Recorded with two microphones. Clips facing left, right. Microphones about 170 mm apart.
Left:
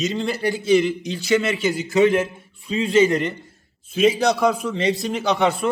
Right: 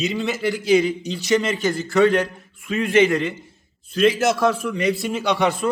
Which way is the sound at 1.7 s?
20° left (ahead or behind).